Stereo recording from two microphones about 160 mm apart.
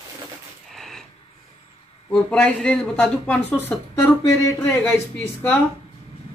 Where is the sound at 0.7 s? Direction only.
Centre (ahead or behind).